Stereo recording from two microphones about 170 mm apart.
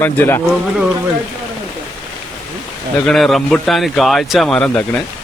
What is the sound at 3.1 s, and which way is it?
Speech, centre (ahead or behind).